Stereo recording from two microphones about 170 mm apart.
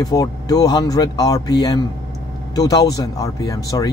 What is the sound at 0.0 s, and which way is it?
A man's voice, 20° left (ahead or behind).